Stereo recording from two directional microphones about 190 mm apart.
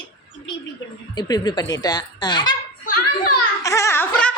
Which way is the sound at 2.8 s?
50° left (ahead or behind).